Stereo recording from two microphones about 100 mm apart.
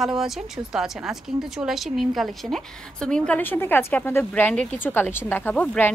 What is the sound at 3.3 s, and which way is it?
Speech, 20° left (ahead or behind).